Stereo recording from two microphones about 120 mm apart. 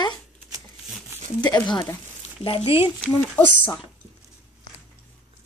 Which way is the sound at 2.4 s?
50° left (ahead or behind).